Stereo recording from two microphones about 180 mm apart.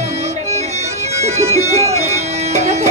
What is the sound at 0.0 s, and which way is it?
Bagpipes, 40° right (ahead or behind).